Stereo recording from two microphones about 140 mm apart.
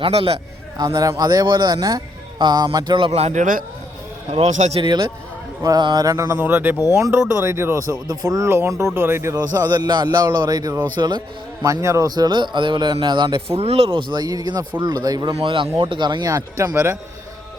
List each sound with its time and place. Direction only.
0.0 s speech: 40° right (ahead or behind)
0.9 s speech: 25° right (ahead or behind)
3.1 s speech: 50° right (ahead or behind)
4.8 s speech: 30° right (ahead or behind)
13.6 s speech: 45° right (ahead or behind); by 15.4 s 25° right (ahead or behind)
15.4 s speech: 40° right (ahead or behind); by 17.0 s 20° right (ahead or behind)